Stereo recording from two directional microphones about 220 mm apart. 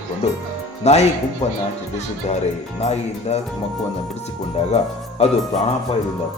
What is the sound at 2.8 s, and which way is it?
Music, 30° left (ahead or behind).